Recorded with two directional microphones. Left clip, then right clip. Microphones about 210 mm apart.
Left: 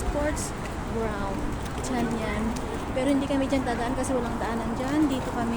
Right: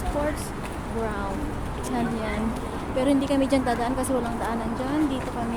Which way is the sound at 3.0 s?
20° right (ahead or behind).